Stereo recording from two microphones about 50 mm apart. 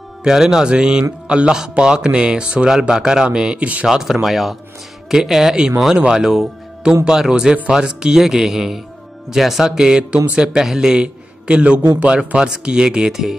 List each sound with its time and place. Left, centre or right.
0.2 s a man's voice: centre